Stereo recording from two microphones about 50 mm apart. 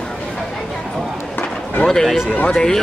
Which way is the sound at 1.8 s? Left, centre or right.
Centre.